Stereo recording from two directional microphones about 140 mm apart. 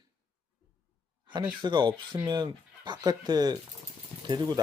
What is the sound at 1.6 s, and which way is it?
Speech, 35° right (ahead or behind).